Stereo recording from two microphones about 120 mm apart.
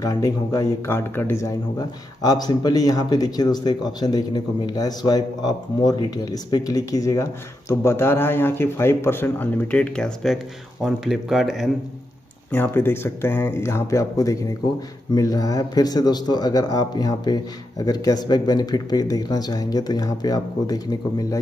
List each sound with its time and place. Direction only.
0.0 s speech: 30° left (ahead or behind)
0.9 s speech: 20° left (ahead or behind); by 11.7 s 5° right (ahead or behind)
12.4 s speech: 15° left (ahead or behind); by 21.4 s 30° left (ahead or behind)